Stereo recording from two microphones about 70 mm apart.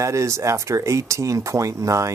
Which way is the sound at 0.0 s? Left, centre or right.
Right.